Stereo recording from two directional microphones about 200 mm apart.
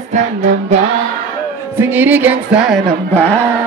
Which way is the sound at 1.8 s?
10° right (ahead or behind).